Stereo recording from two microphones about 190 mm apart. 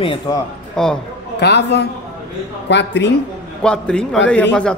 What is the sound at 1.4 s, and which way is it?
A man's voice, 60° left (ahead or behind).